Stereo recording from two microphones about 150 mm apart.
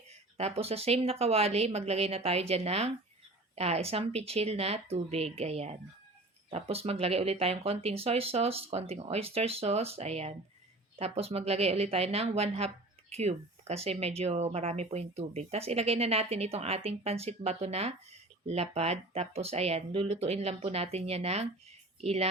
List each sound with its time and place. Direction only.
0.1 s a woman's voice: 45° right (ahead or behind)